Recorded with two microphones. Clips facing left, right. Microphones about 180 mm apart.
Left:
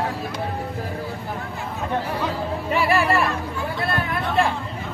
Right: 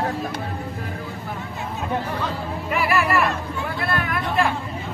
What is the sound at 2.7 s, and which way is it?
Speech, 30° left (ahead or behind).